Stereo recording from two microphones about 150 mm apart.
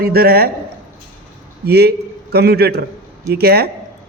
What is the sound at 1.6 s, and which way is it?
A man's voice, 90° right.